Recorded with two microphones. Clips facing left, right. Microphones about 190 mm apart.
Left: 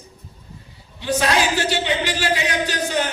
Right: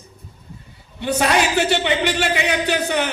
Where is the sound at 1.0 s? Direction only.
60° right (ahead or behind).